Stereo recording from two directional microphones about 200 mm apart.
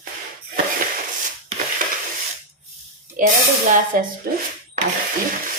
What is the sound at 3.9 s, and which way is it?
Speech, 45° right (ahead or behind).